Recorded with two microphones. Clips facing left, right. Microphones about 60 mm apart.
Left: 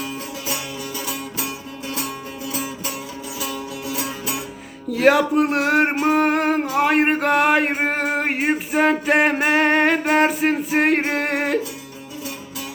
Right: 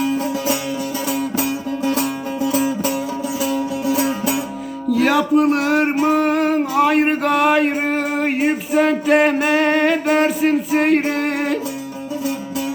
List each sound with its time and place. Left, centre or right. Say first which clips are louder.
3.4 s music: right 8 dB; right
4.9 s speech: even; left
6.1 s a sound: right 2 dB; left
8.4 s music: right 3 dB; left